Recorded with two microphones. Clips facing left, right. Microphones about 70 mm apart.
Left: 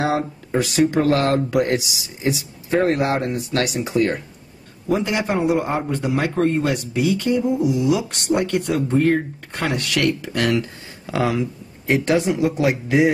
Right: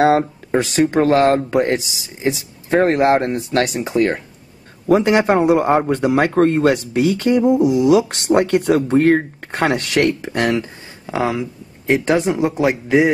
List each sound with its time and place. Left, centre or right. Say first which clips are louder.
0.0 s speech: right 7 dB; right
4.8 s a man's voice: right 7 dB; right
7.7 s speech: right 6 dB; right
8.1 s a man's voice: right 5 dB; right
9.5 s speech: right 6 dB; right